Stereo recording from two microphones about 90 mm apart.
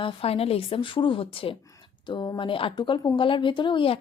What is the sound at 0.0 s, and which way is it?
Speech, 90° left.